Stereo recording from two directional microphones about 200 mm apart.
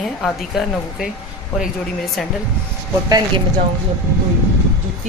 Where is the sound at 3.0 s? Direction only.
20° right (ahead or behind).